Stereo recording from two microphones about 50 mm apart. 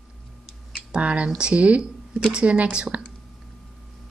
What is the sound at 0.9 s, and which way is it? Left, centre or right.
A woman's voice, right.